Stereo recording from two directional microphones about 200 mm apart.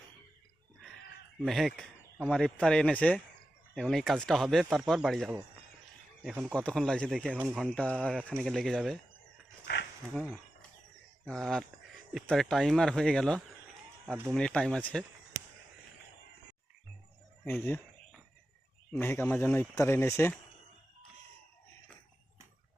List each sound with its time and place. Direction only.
1.5 s speech: centre (ahead or behind)
10.2 s a sound: 5° left (ahead or behind)
11.3 s speech: centre (ahead or behind)
15.3 s a sound: 35° right (ahead or behind)
17.5 s fowl: 5° left (ahead or behind)
18.9 s speech: 10° left (ahead or behind)